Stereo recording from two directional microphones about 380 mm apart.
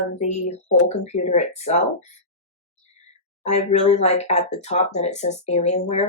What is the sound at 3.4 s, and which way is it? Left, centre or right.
Speech, centre.